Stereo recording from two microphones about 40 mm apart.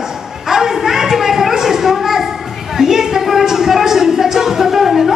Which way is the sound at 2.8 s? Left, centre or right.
Centre.